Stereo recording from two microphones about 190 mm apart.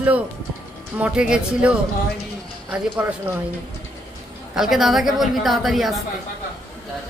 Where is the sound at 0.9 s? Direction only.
5° right (ahead or behind).